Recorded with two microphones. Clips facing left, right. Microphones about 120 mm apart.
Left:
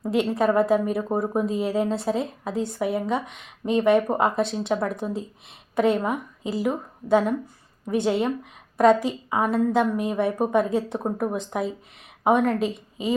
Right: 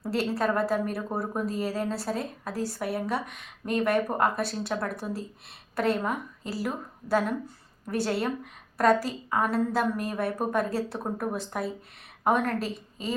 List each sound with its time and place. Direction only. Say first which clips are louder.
0.0 s a woman's voice: left 5 dB; 15° left (ahead or behind)